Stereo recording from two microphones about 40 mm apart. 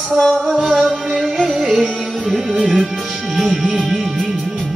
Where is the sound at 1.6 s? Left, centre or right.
Centre.